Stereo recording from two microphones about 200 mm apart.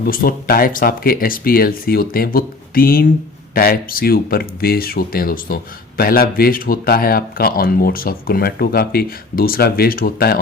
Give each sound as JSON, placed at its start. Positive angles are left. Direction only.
{"t": 0.0, "sound": "speech", "side_deg": 45}